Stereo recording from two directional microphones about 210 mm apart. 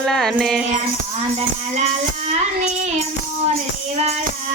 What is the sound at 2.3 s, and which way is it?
Music, 30° right (ahead or behind).